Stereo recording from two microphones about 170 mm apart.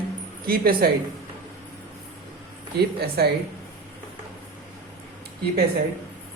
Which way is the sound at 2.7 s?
70° right (ahead or behind).